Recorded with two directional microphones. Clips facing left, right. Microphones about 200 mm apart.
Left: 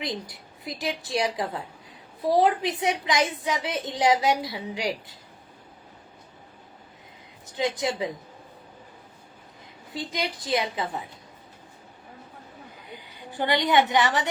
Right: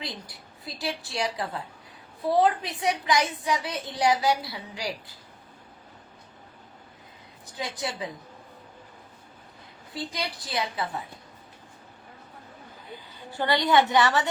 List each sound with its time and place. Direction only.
0.0 s a woman's voice: 20° left (ahead or behind)
7.5 s a woman's voice: 20° left (ahead or behind)
9.9 s a woman's voice: 20° left (ahead or behind)
12.9 s a woman's voice: 15° left (ahead or behind)